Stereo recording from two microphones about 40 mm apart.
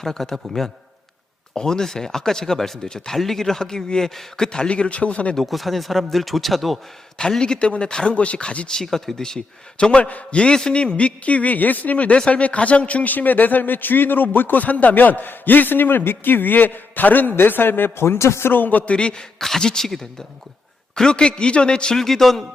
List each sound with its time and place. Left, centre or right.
0.0 s speech: centre
1.5 s speech: centre
4.7 s speech: left
5.4 s speech: centre
7.2 s a man's voice: centre
8.7 s speech: centre
9.7 s a man's voice: left
10.0 s a man's voice: left
18.5 s a man's voice: left
18.9 s a man's voice: left
19.4 s a man's voice: centre
21.9 s speech: centre